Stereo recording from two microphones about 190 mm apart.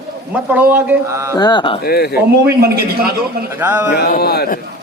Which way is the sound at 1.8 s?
55° left (ahead or behind).